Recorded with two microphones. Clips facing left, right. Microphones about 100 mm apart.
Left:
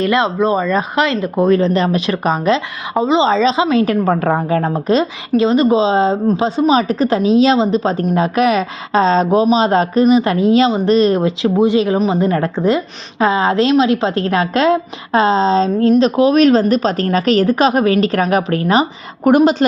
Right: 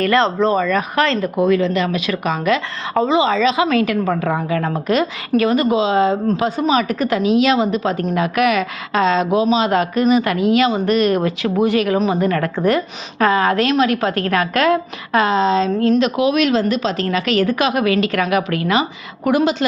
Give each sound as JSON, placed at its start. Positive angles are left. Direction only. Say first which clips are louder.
{"t": 0.0, "sound": "speech", "louder": "left 1 dB", "side_deg": 15}
{"t": 1.4, "sound": "a woman's voice", "louder": "left 4 dB", "side_deg": 35}
{"t": 3.8, "sound": "a woman's voice", "louder": "left 4 dB", "side_deg": 40}
{"t": 5.4, "sound": "a woman's voice", "louder": "left 4 dB", "side_deg": 25}